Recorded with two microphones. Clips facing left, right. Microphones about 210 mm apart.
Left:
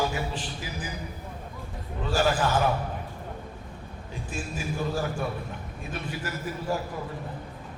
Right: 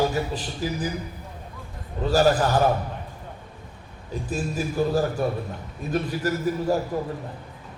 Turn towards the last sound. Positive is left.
turn(degrees=-40)  # may be behind; listen again after turning